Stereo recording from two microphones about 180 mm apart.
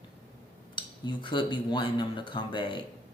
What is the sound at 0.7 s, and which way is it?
Speech, 25° left (ahead or behind).